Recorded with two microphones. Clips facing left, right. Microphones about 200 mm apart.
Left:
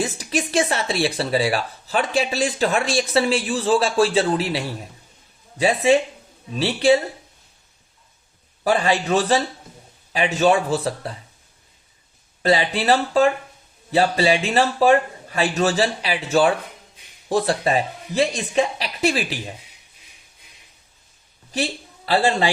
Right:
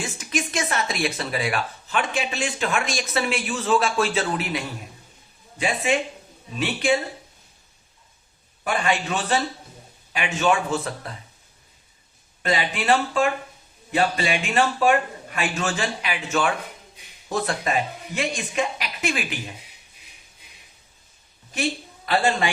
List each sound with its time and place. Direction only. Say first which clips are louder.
0.0 s speech: left 4 dB; 35° left (ahead or behind)
8.6 s speech: left 5 dB; 35° left (ahead or behind)
12.4 s speech: left 5 dB; 35° left (ahead or behind)
21.5 s a man's voice: left 1 dB; 30° left (ahead or behind)